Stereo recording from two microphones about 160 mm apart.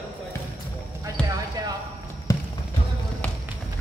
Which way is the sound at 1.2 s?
5° left (ahead or behind).